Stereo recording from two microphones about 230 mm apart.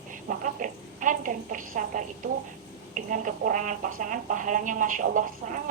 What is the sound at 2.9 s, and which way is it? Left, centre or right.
A woman's voice, right.